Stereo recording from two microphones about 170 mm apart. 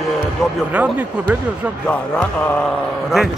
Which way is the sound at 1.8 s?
5° left (ahead or behind).